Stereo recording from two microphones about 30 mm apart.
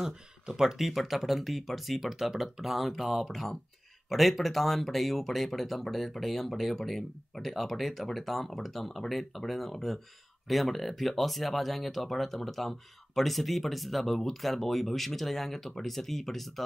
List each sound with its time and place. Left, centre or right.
0.0 s speech: centre
0.8 s speech: centre